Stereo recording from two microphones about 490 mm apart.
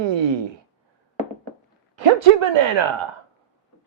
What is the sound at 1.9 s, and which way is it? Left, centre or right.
Speech, right.